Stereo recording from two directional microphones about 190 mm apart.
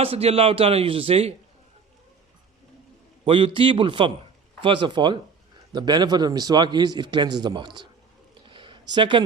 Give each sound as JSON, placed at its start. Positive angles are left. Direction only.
{"t": 0.0, "sound": "a man's voice", "side_deg": -30}
{"t": 3.2, "sound": "a man's voice", "side_deg": -25}
{"t": 8.4, "sound": "a sound", "side_deg": -25}